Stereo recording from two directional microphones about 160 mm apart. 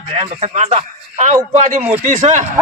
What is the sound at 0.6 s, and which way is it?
A man's voice, 45° right (ahead or behind).